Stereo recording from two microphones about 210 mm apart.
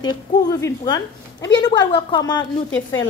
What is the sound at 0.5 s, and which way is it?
A woman's voice, 15° left (ahead or behind).